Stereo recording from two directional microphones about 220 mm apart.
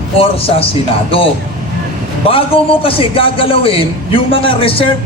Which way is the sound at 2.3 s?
25° left (ahead or behind).